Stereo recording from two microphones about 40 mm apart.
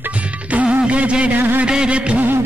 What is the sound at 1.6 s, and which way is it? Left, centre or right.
Music, right.